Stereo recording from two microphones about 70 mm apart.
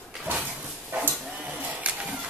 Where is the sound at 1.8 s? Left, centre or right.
Centre.